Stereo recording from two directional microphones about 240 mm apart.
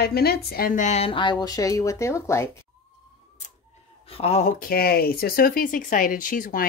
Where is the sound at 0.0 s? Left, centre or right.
Left; by 2.5 s centre.